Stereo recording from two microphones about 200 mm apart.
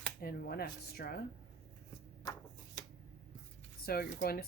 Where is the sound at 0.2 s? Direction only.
50° left (ahead or behind).